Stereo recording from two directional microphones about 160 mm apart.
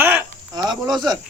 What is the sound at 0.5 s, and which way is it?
Speech, 25° right (ahead or behind).